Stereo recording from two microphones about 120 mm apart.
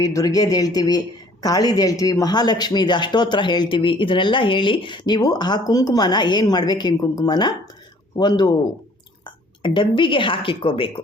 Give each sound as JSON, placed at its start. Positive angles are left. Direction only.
{"t": 0.0, "sound": "a woman's voice", "side_deg": 30}